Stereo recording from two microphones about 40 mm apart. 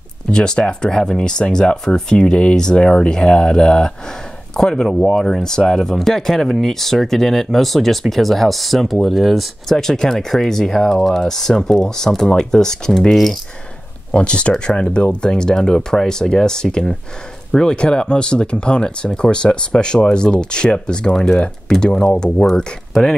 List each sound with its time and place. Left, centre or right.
0.3 s speech: centre
4.8 s speech: centre
9.7 s speech: centre
13.1 s speech: centre
14.1 s speech: left